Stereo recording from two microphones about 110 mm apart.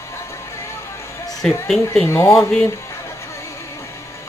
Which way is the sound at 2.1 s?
25° left (ahead or behind).